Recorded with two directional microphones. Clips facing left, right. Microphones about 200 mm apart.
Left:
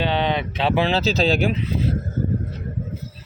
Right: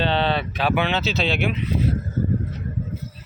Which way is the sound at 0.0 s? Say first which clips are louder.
Even; 15° left (ahead or behind).